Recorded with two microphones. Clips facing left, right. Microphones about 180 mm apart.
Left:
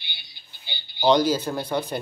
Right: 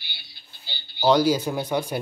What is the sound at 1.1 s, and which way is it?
Speech, 10° right (ahead or behind).